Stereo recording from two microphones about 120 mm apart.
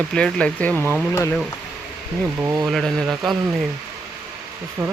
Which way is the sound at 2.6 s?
Centre (ahead or behind).